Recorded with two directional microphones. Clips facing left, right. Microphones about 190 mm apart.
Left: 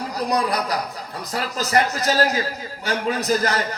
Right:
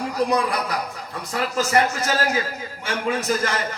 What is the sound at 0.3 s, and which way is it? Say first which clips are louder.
A man's voice: even; 35° left (ahead or behind).